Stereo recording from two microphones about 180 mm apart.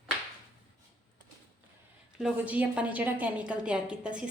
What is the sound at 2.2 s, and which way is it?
A woman's voice, 5° right (ahead or behind).